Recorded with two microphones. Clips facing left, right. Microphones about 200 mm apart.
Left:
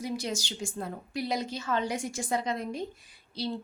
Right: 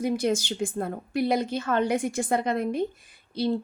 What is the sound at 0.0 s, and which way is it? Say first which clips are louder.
A woman's voice: right 8 dB; 55° right (ahead or behind).